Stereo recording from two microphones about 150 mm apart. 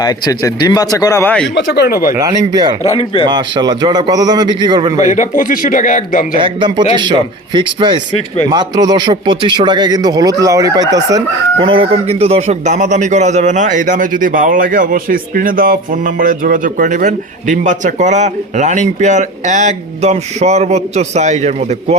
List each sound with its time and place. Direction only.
0.0 s speech: 25° left (ahead or behind)
1.7 s speech: 90° left
2.1 s a man's voice: 25° right (ahead or behind)
2.9 s speech: 35° left (ahead or behind)
3.2 s a man's voice: 30° right (ahead or behind)
4.9 s speech: 55° left (ahead or behind)
6.4 s a man's voice: 30° right (ahead or behind)
11.6 s a man's voice: 35° right (ahead or behind)